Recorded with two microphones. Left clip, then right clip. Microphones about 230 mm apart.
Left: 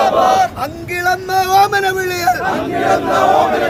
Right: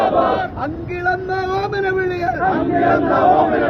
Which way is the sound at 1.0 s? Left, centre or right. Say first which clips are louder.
Left 5 dB; left.